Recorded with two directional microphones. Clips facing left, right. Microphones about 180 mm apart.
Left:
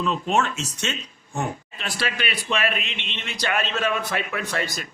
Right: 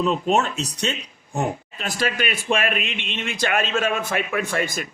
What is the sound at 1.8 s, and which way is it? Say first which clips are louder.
Speech: right 4 dB; 45° right (ahead or behind).